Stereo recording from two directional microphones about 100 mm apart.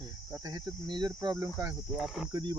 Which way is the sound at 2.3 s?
45° right (ahead or behind).